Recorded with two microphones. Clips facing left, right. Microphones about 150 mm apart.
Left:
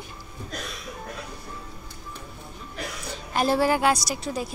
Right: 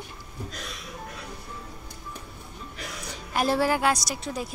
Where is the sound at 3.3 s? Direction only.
Centre (ahead or behind).